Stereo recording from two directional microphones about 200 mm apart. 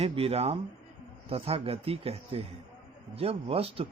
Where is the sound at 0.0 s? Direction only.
30° right (ahead or behind).